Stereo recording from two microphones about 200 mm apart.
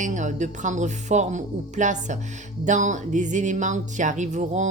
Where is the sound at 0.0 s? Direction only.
40° right (ahead or behind).